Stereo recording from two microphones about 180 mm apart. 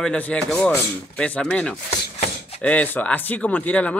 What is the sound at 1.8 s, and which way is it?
Chopping, 35° left (ahead or behind).